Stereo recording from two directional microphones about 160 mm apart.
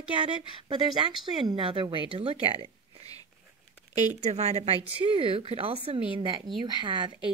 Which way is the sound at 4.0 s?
45° right (ahead or behind).